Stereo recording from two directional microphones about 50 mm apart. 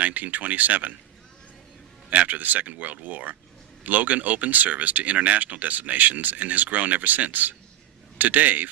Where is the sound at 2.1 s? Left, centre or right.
Right.